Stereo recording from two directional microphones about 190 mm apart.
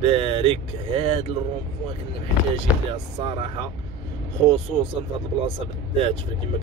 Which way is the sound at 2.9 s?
30° right (ahead or behind).